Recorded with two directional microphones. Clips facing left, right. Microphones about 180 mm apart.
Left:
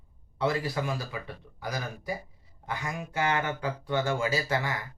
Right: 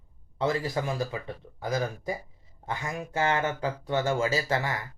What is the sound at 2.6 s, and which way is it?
Speech, 25° right (ahead or behind).